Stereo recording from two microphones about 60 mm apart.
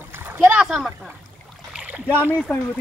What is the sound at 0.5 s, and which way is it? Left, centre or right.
Speech, centre.